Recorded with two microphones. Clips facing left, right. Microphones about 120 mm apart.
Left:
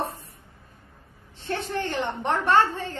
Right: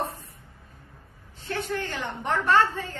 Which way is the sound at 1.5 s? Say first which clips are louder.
Left 2 dB; 25° left (ahead or behind).